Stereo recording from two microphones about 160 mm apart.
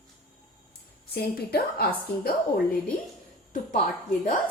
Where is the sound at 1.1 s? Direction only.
75° left (ahead or behind).